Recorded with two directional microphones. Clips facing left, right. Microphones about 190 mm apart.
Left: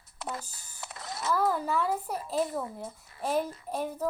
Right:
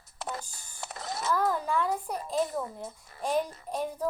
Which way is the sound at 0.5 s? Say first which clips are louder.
Right 3 dB; 45° right (ahead or behind).